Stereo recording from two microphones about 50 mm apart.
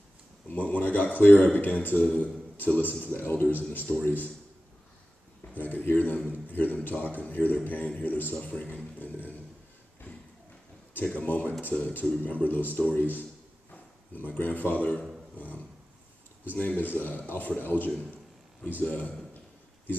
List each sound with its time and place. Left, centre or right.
0.5 s a man's voice: left
5.5 s a man's voice: left
11.1 s a man's voice: left
15.3 s dog: left
16.4 s a man's voice: left